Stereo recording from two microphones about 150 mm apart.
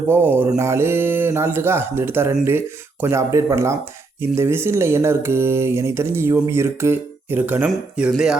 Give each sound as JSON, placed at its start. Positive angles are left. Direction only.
{"t": 0.3, "sound": "speech", "side_deg": -15}